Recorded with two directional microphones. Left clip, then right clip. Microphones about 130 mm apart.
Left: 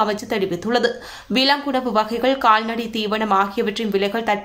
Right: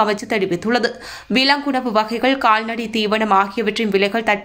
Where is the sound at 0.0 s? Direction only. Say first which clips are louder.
Right 3 dB; 20° right (ahead or behind).